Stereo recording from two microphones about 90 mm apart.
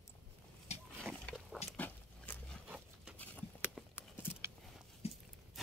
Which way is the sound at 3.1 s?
15° left (ahead or behind).